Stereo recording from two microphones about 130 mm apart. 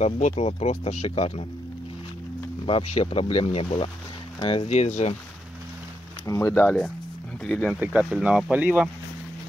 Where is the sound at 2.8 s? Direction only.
55° left (ahead or behind).